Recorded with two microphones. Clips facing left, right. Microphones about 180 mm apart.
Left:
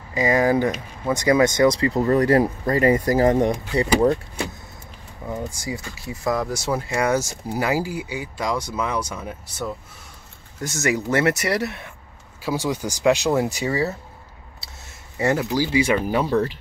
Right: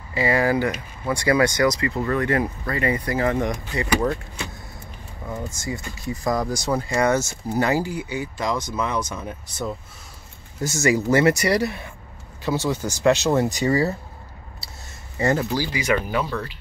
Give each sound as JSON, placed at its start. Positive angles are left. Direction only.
{"t": 0.1, "sound": "speech", "side_deg": 15}
{"t": 5.3, "sound": "speech", "side_deg": 10}
{"t": 10.6, "sound": "speech", "side_deg": 0}
{"t": 15.1, "sound": "speech", "side_deg": 5}
{"t": 15.6, "sound": "speech", "side_deg": 25}